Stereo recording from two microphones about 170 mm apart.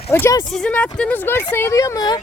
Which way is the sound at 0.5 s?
5° left (ahead or behind).